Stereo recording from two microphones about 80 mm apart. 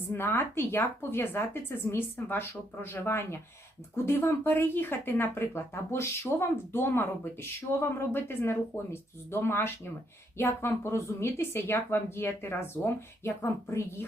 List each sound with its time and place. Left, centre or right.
0.1 s speech: left